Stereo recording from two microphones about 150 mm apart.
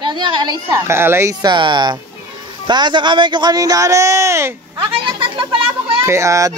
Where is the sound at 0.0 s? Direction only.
30° right (ahead or behind); by 1.3 s 15° right (ahead or behind).